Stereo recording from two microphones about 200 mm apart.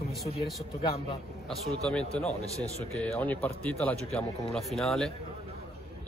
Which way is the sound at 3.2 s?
5° left (ahead or behind).